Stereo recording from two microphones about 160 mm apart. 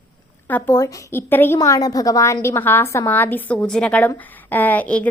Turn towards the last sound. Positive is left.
turn(degrees=10)  # may be behind; listen again after turning